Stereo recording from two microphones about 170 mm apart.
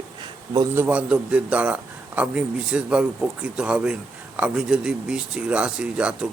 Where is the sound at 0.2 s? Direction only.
25° right (ahead or behind).